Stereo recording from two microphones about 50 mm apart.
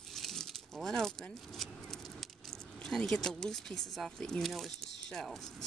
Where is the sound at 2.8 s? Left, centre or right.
Centre.